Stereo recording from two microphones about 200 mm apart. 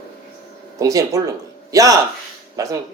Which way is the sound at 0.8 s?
15° right (ahead or behind).